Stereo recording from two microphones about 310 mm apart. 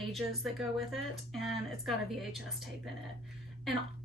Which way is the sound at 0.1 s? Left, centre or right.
Centre.